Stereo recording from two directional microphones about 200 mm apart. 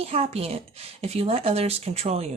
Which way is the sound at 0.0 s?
30° right (ahead or behind).